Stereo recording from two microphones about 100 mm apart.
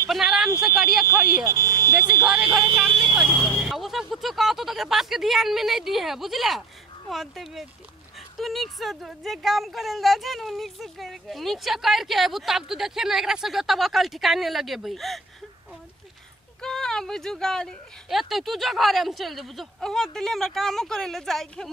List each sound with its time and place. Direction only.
0.1 s a sound: 5° right (ahead or behind)
0.7 s speech: 5° right (ahead or behind)
1.0 s smoke detector: 30° right (ahead or behind)
2.6 s vehicle: 55° right (ahead or behind)
3.6 s speech: centre (ahead or behind)
16.6 s speech: 5° left (ahead or behind)